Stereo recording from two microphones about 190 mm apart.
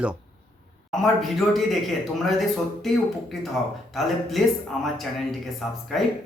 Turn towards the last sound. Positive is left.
turn(degrees=0)  # may be behind; listen again after turning